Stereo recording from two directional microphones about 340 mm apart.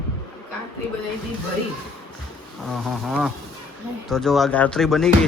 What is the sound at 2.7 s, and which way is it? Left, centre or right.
Speech, centre.